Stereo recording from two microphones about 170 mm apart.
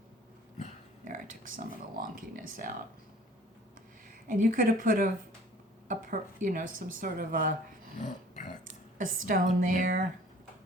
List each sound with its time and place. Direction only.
1.0 s speech: 50° right (ahead or behind)
4.3 s a woman's voice: 55° right (ahead or behind)
9.0 s speech: 50° right (ahead or behind)